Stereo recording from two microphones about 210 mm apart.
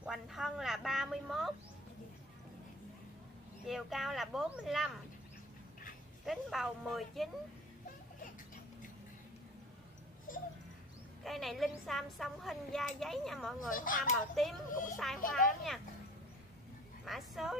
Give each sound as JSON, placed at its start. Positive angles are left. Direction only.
{"t": 0.0, "sound": "a sound", "side_deg": 0}
{"t": 3.6, "sound": "a woman's voice", "side_deg": 0}
{"t": 6.2, "sound": "a woman's voice", "side_deg": 0}
{"t": 10.3, "sound": "a sound", "side_deg": 40}
{"t": 11.2, "sound": "a woman's voice", "side_deg": 0}
{"t": 13.7, "sound": "a child's voice", "side_deg": 40}
{"t": 14.1, "sound": "a woman's voice", "side_deg": 0}
{"t": 14.7, "sound": "a child's voice", "side_deg": 40}
{"t": 15.3, "sound": "a woman's voice", "side_deg": 0}
{"t": 17.0, "sound": "speech", "side_deg": 0}